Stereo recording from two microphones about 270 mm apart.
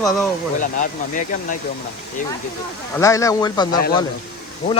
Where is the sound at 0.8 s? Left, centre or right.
Left.